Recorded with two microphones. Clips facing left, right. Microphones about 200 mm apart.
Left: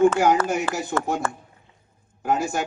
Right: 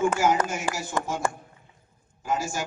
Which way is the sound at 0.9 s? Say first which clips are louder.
Left 4 dB; 55° left (ahead or behind).